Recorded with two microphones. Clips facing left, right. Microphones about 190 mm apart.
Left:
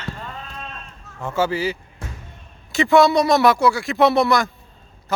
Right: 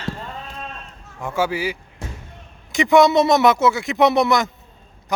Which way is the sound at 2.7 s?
15° right (ahead or behind).